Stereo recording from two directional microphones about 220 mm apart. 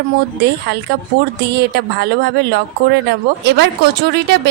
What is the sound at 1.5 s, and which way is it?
A woman's voice, 50° right (ahead or behind).